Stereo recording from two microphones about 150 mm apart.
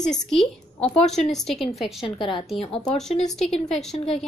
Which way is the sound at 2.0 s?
35° left (ahead or behind).